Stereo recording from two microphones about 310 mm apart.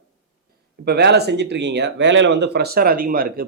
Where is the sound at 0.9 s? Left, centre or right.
Right.